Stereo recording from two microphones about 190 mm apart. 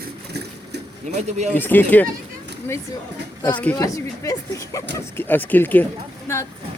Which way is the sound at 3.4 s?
20° left (ahead or behind).